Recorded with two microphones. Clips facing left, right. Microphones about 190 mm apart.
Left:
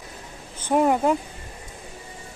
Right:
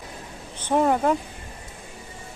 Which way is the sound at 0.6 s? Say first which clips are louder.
Left 1 dB; 10° left (ahead or behind).